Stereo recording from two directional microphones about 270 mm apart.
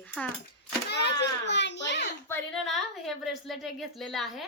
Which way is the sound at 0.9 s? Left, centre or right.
Left.